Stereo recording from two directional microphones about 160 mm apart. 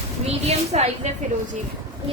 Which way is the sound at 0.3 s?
40° right (ahead or behind).